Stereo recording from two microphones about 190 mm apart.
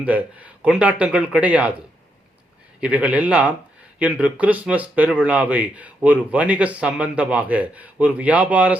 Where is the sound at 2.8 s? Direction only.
5° right (ahead or behind).